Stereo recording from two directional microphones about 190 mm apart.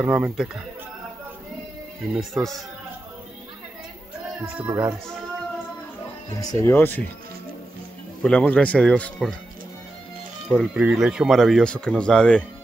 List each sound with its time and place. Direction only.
0.0 s speech: 5° right (ahead or behind)
2.1 s speech: centre (ahead or behind)
6.4 s speech: 15° left (ahead or behind)
8.2 s speech: 5° left (ahead or behind)
10.5 s speech: 5° right (ahead or behind)